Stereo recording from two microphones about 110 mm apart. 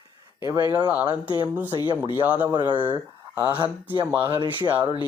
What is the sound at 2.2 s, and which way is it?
Speech, 15° right (ahead or behind).